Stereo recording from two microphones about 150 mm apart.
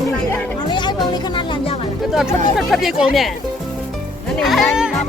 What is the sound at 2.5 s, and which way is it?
Speech, centre (ahead or behind).